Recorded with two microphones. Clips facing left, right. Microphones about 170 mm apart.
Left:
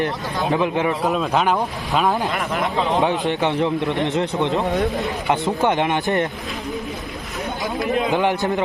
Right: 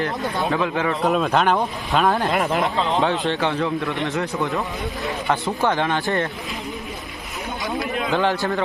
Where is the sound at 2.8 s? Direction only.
15° left (ahead or behind).